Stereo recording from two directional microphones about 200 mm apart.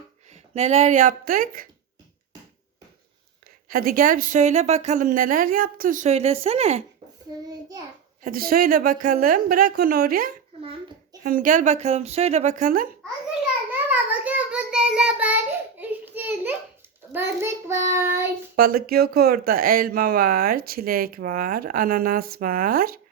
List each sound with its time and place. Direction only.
0.5 s a woman's voice: 35° right (ahead or behind)
3.7 s a woman's voice: 45° right (ahead or behind); by 6.8 s 30° right (ahead or behind)
7.3 s a child's voice: 20° right (ahead or behind)
8.2 s speech: 45° right (ahead or behind)
10.6 s a sound: 25° right (ahead or behind)
11.2 s a woman's voice: 45° right (ahead or behind)
13.7 s child singing: 10° right (ahead or behind)
18.5 s speech: 50° right (ahead or behind)